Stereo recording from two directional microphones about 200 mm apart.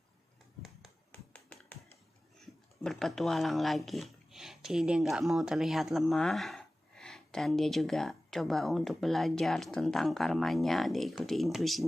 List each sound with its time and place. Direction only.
0.6 s tap: 5° left (ahead or behind)
2.8 s speech: centre (ahead or behind)